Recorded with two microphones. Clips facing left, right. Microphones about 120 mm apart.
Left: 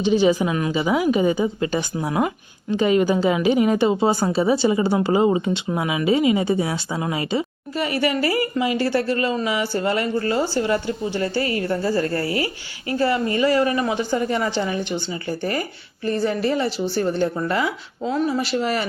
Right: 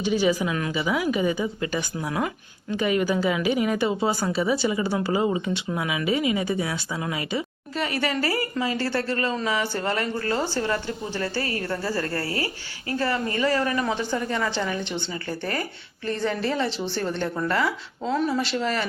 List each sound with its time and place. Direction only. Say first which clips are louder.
0.0 s a woman's voice: left 5 dB; 25° left (ahead or behind)
7.8 s a woman's voice: left 4 dB; 10° left (ahead or behind)